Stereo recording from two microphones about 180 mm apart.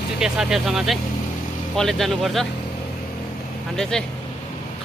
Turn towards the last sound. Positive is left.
turn(degrees=5)  # may be behind; listen again after turning